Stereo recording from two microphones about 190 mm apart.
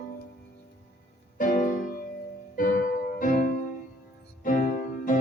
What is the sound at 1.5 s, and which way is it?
Music, 45° left (ahead or behind).